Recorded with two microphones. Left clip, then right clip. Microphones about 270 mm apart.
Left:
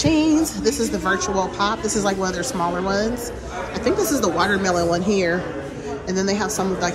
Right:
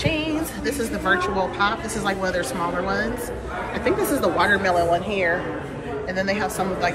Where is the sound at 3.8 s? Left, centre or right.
Centre.